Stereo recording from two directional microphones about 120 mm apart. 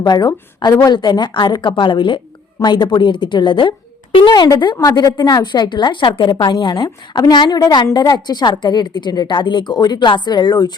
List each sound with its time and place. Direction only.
0.0 s a woman's voice: 35° left (ahead or behind)